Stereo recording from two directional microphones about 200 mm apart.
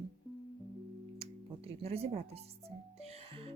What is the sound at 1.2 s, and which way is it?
Speech, 30° right (ahead or behind).